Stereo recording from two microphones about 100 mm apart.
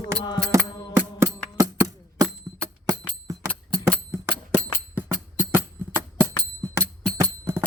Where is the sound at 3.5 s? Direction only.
15° left (ahead or behind).